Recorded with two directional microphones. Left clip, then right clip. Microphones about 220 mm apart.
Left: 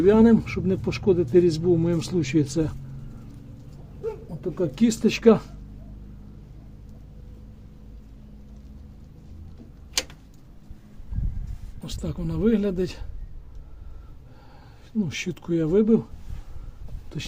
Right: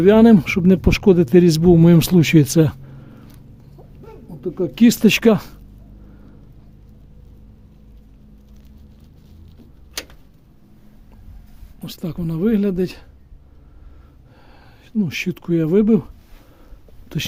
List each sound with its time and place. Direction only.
0.0 s speech: 45° right (ahead or behind)
4.4 s speech: 30° right (ahead or behind); by 5.5 s 50° right (ahead or behind)
11.8 s a man's voice: 30° right (ahead or behind)
14.9 s a man's voice: 35° right (ahead or behind)